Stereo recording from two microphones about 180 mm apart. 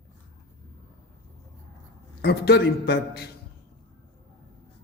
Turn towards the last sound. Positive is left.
turn(degrees=65)  # may be behind; listen again after turning